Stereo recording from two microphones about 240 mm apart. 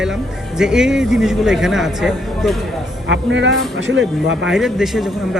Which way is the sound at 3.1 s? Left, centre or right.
Right.